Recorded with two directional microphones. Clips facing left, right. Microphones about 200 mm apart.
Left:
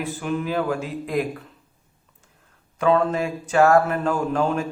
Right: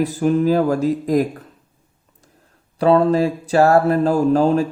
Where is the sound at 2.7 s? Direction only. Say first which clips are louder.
Right 5 dB; 35° right (ahead or behind).